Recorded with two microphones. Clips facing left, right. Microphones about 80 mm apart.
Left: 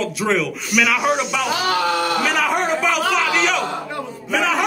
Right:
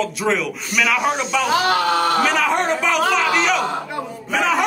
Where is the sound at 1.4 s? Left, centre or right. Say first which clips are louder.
Right 4 dB; right.